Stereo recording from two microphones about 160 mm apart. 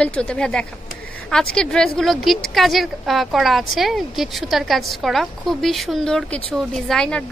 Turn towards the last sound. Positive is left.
turn(degrees=5)  # may be behind; listen again after turning